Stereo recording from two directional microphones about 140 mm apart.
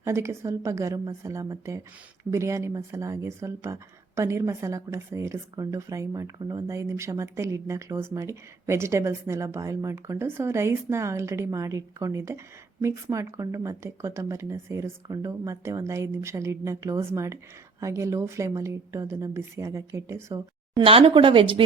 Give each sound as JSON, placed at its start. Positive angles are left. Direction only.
{"t": 0.0, "sound": "speech", "side_deg": -20}
{"t": 20.8, "sound": "speech", "side_deg": -40}